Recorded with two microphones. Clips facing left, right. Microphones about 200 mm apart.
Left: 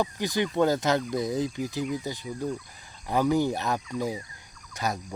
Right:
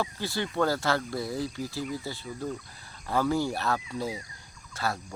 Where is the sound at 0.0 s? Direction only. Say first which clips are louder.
Left 4 dB; 15° left (ahead or behind).